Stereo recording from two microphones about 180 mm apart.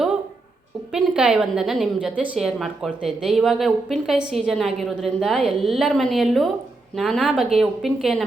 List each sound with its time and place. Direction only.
0.9 s a woman's voice: 5° right (ahead or behind)